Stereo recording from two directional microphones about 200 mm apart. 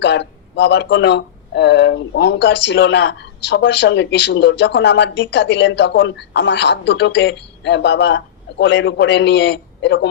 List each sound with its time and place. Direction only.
0.0 s speech: 60° left (ahead or behind)